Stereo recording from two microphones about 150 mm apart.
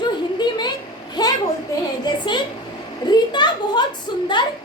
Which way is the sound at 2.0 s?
30° left (ahead or behind).